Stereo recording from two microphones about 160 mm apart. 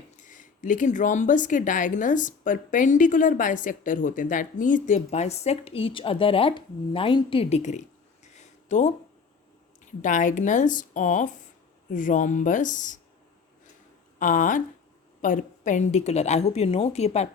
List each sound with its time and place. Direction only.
0.2 s speech: 55° left (ahead or behind)
14.2 s speech: 55° left (ahead or behind)